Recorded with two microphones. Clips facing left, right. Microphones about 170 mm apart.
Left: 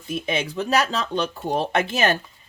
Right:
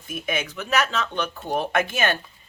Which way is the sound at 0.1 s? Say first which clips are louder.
Left 3 dB; 30° left (ahead or behind).